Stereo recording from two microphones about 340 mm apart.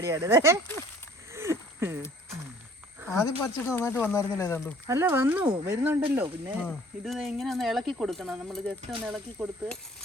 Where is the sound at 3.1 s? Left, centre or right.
Centre.